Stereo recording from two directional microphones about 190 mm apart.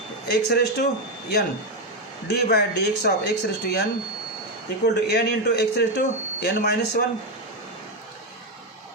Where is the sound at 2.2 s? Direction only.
60° left (ahead or behind).